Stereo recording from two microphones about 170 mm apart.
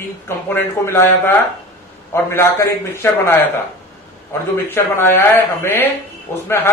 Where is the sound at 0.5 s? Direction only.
15° left (ahead or behind).